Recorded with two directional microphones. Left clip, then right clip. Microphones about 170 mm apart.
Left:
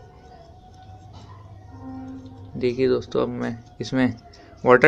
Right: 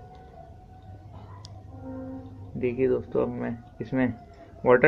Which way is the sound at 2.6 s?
25° left (ahead or behind).